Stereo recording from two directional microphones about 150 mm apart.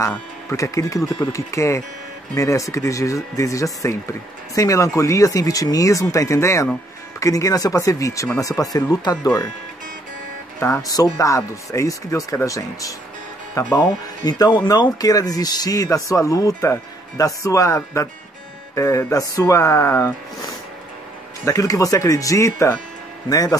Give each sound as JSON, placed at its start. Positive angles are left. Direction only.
{"t": 0.1, "sound": "speech", "side_deg": 20}
{"t": 10.6, "sound": "speech", "side_deg": 25}
{"t": 13.6, "sound": "speech", "side_deg": 10}
{"t": 14.2, "sound": "speech", "side_deg": 30}